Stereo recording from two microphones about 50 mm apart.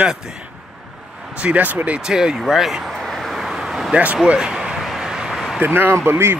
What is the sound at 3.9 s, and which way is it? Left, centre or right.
Speech, right.